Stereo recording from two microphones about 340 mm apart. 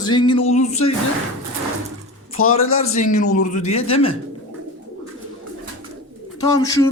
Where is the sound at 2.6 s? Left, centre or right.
Left.